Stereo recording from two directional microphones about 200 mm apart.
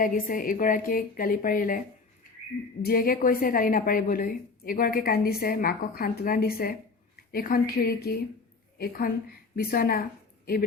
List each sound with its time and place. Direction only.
0.0 s a woman's voice: 45° left (ahead or behind)
2.8 s a woman's voice: 45° left (ahead or behind)